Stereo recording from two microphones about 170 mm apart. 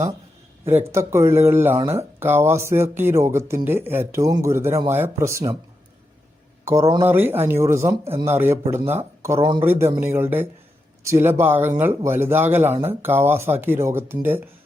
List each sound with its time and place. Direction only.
0.7 s speech: 15° right (ahead or behind)
7.0 s speech: 10° right (ahead or behind)
9.6 s speech: 15° right (ahead or behind)